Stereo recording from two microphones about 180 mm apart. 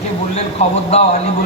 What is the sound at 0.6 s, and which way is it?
Speech, 35° left (ahead or behind).